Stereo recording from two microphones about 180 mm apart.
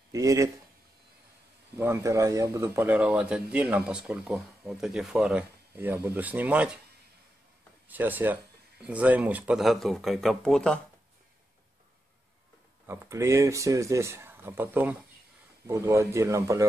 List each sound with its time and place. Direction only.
0.1 s speech: 20° right (ahead or behind)
1.8 s speech: 15° right (ahead or behind)
7.9 s speech: 10° right (ahead or behind)
12.8 s speech: 15° right (ahead or behind)